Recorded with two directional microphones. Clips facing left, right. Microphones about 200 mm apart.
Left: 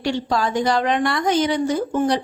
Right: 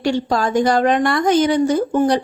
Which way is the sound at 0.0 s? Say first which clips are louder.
Right 3 dB; 45° right (ahead or behind).